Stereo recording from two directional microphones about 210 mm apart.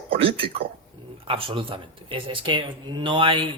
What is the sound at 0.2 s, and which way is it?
Speech, 25° right (ahead or behind).